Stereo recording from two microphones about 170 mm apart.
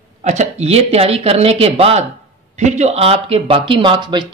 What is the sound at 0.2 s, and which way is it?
Speech, 40° right (ahead or behind).